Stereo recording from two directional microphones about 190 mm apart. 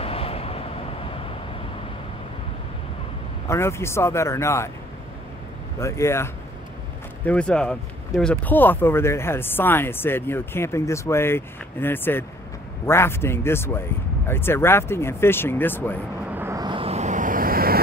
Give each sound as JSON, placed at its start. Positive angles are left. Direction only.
{"t": 0.0, "sound": "vehicle", "side_deg": 30}
{"t": 3.4, "sound": "speech", "side_deg": 15}
{"t": 5.8, "sound": "speech", "side_deg": 15}
{"t": 16.3, "sound": "vehicle", "side_deg": -10}